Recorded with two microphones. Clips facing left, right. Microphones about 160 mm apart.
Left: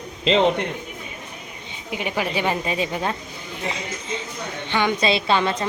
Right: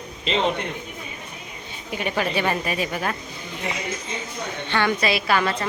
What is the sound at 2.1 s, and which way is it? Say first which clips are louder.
A woman's voice: even; 15° left (ahead or behind).